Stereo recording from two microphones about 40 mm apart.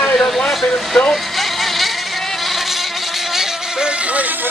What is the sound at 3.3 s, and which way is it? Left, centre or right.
Vehicle, centre.